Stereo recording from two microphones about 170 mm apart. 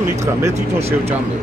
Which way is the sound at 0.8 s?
35° right (ahead or behind).